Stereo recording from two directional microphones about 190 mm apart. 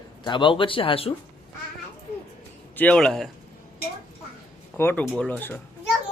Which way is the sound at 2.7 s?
5° left (ahead or behind).